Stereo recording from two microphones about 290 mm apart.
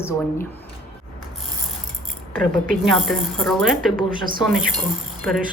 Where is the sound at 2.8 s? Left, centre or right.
Centre.